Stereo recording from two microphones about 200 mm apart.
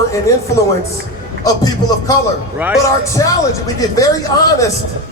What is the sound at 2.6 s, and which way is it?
Speech, 5° right (ahead or behind).